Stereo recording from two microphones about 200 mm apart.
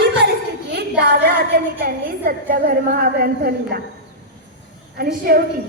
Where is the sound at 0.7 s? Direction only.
55° right (ahead or behind).